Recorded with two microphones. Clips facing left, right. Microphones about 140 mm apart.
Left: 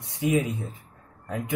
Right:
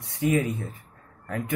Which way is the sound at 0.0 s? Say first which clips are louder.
Even; 20° left (ahead or behind).